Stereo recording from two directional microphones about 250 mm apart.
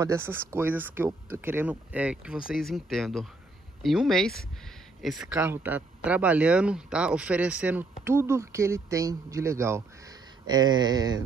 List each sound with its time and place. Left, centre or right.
0.0 s speech: centre